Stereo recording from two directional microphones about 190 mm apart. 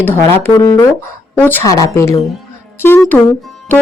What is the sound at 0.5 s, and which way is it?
Speech, 20° left (ahead or behind).